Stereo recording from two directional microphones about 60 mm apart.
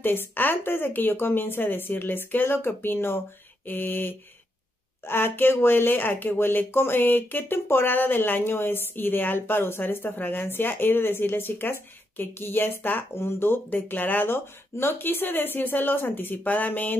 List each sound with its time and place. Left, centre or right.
0.0 s speech: left